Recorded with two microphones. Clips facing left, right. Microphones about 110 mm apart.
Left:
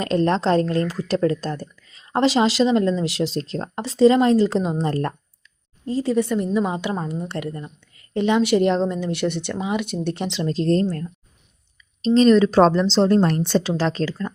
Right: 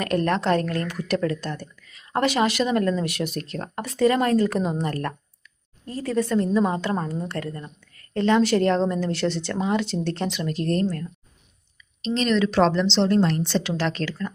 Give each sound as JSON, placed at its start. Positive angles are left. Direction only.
{"t": 0.0, "sound": "a woman's voice", "side_deg": 25}
{"t": 10.3, "sound": "a woman's voice", "side_deg": 30}
{"t": 13.6, "sound": "speech", "side_deg": 35}